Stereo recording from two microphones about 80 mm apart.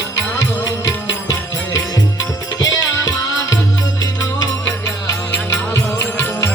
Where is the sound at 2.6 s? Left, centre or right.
Left.